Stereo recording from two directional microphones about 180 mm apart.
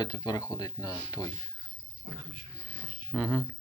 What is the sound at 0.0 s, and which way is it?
Speech, 25° left (ahead or behind).